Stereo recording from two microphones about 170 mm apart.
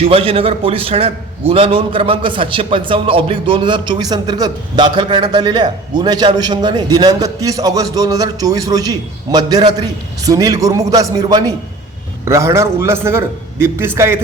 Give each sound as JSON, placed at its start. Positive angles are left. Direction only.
{"t": 0.0, "sound": "a man's voice", "side_deg": -35}